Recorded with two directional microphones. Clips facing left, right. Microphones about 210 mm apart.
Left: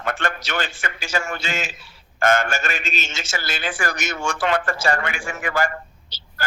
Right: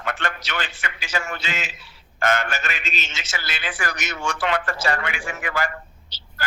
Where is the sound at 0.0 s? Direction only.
45° left (ahead or behind).